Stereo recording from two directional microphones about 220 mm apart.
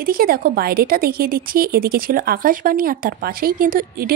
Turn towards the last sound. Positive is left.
turn(degrees=-40)  # may be behind; listen again after turning